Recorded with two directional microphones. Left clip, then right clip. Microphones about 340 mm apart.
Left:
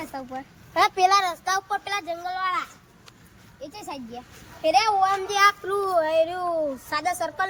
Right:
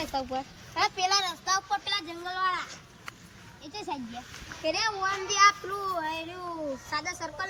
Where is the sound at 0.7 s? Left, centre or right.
Centre.